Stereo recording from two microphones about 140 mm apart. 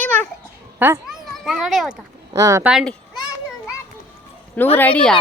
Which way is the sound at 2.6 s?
5° right (ahead or behind).